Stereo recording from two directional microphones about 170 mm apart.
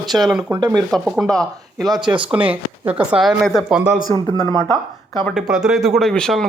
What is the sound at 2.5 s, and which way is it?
Speech, 10° right (ahead or behind).